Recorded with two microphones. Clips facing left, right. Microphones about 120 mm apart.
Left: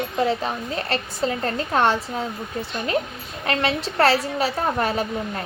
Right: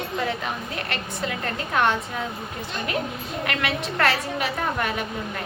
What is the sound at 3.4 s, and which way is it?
A woman's voice, 30° left (ahead or behind).